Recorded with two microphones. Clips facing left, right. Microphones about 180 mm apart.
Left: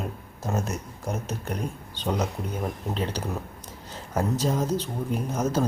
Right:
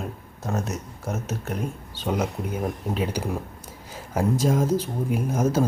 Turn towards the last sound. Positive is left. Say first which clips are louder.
# right 3 dB
turn(degrees=-10)  # may be behind; listen again after turning